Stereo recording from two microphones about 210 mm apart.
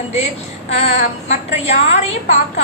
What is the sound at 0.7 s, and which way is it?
A woman's voice, 30° left (ahead or behind).